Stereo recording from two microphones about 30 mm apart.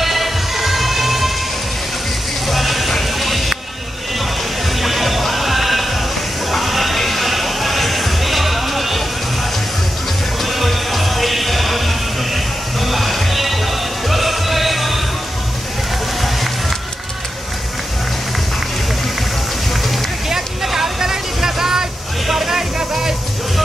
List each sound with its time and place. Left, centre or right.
0.0 s music: centre
2.4 s vehicle: centre
2.9 s music: centre
4.7 s music: centre
10.4 s music: centre
20.2 s a sound: centre
21.0 s vehicle: centre
22.3 s music: centre